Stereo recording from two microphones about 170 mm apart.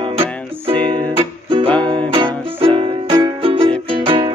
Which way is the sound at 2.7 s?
30° right (ahead or behind).